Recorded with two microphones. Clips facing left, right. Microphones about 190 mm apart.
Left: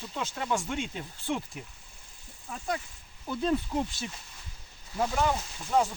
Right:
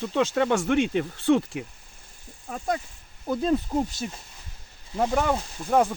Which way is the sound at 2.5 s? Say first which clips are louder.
Right 5 dB; 50° right (ahead or behind).